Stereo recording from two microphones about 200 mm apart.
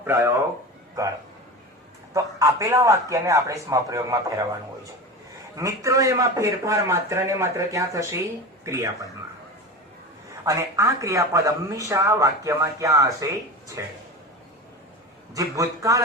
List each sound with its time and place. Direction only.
0.0 s speech: 10° right (ahead or behind)
2.1 s a man's voice: 15° right (ahead or behind)
5.5 s a man's voice: 15° right (ahead or behind)
10.4 s a man's voice: 15° right (ahead or behind)
15.4 s a man's voice: 15° right (ahead or behind)